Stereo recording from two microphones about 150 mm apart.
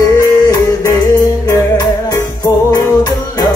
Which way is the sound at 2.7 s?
25° left (ahead or behind).